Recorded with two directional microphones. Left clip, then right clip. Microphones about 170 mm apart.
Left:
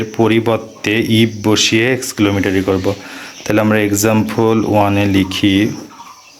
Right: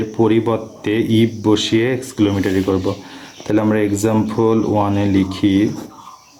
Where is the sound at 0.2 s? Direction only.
15° left (ahead or behind).